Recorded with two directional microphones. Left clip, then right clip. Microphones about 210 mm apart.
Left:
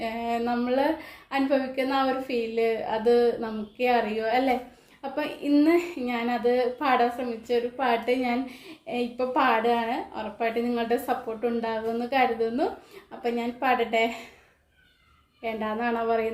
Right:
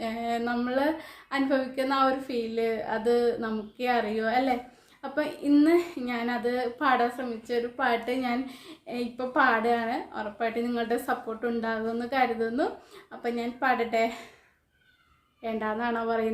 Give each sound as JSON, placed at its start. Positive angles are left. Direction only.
{"t": 0.0, "sound": "a woman's voice", "side_deg": -15}
{"t": 15.4, "sound": "a woman's voice", "side_deg": -15}